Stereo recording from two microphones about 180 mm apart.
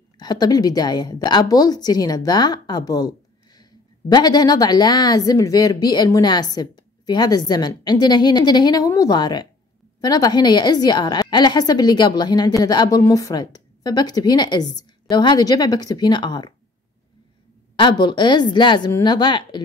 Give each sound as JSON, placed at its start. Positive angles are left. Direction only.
{"t": 0.2, "sound": "a woman's voice", "side_deg": 20}
{"t": 17.7, "sound": "a woman's voice", "side_deg": 25}